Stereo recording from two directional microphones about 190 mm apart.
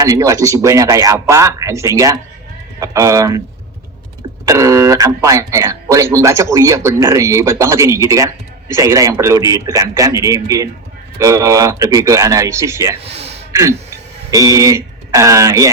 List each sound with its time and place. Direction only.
0.0 s speech: 15° right (ahead or behind)
4.4 s speech: 15° right (ahead or behind)
13.0 s gasp: 30° right (ahead or behind)
13.5 s speech: 15° right (ahead or behind)